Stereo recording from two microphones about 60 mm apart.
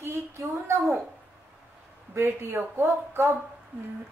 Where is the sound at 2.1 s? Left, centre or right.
Right.